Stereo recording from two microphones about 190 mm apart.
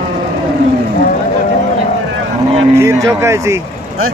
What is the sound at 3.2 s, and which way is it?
Speech, 15° right (ahead or behind).